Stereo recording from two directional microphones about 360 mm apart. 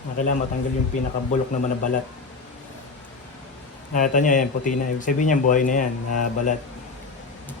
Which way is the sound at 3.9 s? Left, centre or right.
Left.